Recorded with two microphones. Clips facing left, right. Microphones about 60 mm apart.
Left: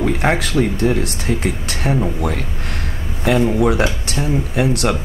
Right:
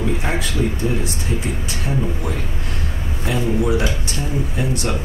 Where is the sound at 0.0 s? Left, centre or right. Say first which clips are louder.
Left 5 dB; left.